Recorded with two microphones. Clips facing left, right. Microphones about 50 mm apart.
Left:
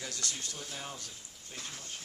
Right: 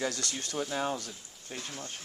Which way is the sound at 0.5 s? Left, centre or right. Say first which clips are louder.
Right 11 dB; right.